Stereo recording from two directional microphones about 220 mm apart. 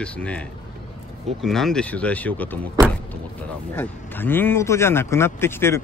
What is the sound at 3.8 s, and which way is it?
Speech, 10° left (ahead or behind).